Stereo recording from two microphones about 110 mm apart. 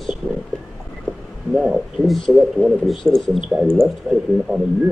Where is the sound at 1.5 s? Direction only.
5° right (ahead or behind).